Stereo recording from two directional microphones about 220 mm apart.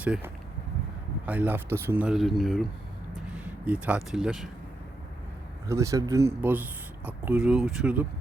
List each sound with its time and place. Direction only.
0.0 s speech: 5° right (ahead or behind)
5.6 s speech: 15° right (ahead or behind)